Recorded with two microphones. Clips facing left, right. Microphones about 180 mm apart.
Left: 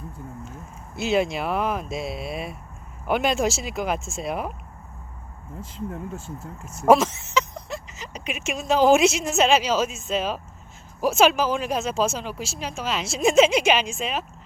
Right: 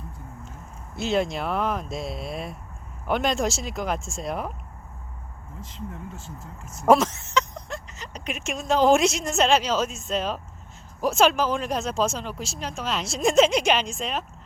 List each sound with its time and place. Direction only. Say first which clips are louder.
0.9 s speech: left 2 dB; 5° left (ahead or behind)
5.7 s speech: left 5 dB; 50° left (ahead or behind)
6.8 s speech: left 1 dB; centre (ahead or behind)